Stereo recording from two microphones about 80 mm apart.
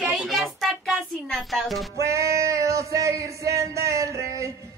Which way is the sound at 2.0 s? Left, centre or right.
Right.